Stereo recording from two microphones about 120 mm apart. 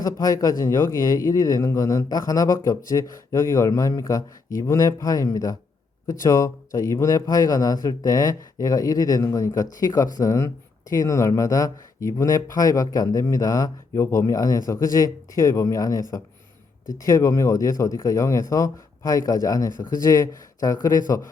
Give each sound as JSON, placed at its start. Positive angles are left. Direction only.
{"t": 0.0, "sound": "speech", "side_deg": 30}